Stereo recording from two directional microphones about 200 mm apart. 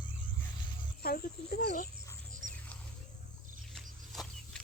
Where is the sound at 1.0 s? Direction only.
50° left (ahead or behind).